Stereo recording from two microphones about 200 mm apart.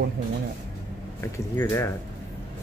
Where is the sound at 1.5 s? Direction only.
15° left (ahead or behind).